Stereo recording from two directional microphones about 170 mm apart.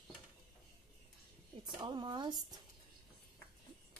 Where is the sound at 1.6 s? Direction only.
25° right (ahead or behind).